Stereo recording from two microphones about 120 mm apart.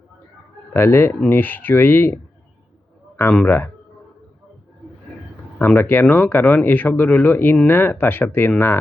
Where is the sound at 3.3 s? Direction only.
15° left (ahead or behind).